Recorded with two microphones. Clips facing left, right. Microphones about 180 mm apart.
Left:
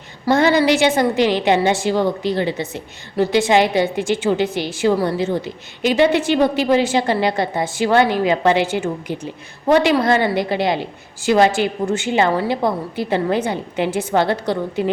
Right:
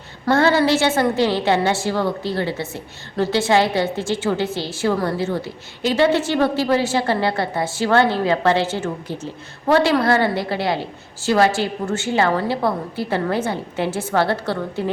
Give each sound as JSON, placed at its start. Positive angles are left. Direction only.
{"t": 0.3, "sound": "a woman's voice", "side_deg": 15}